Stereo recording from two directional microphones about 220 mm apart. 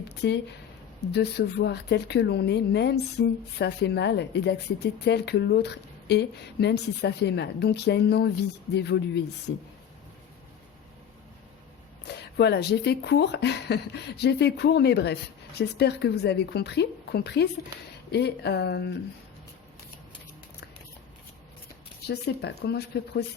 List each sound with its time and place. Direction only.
0.0 s a sound: 50° left (ahead or behind)
1.1 s speech: 50° left (ahead or behind)
12.0 s speech: 50° left (ahead or behind)
22.0 s speech: 50° left (ahead or behind)